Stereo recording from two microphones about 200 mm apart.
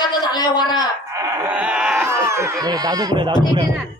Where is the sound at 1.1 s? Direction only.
15° right (ahead or behind).